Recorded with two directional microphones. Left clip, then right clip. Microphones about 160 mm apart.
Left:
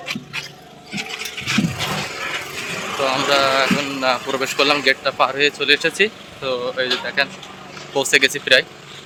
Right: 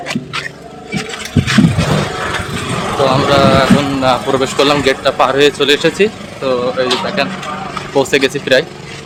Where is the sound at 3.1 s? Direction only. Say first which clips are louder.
Right 5 dB; 5° right (ahead or behind).